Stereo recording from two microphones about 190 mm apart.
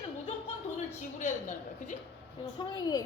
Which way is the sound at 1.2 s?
40° left (ahead or behind).